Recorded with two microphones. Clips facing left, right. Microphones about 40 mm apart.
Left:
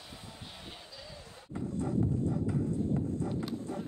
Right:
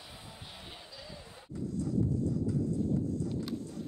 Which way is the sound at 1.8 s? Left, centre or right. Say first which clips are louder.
Even; left.